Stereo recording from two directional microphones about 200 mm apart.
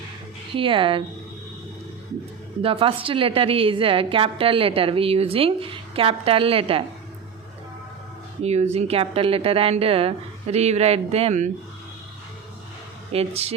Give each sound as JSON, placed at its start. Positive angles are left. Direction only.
{"t": 0.5, "sound": "a woman's voice", "side_deg": -25}
{"t": 2.6, "sound": "a woman's voice", "side_deg": -25}
{"t": 8.4, "sound": "speech", "side_deg": -35}
{"t": 13.1, "sound": "speech", "side_deg": -30}